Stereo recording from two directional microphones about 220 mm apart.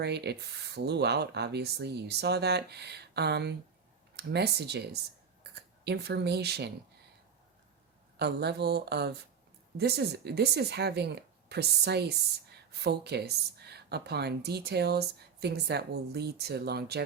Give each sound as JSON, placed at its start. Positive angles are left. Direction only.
{"t": 0.0, "sound": "speech", "side_deg": -50}
{"t": 8.2, "sound": "speech", "side_deg": -50}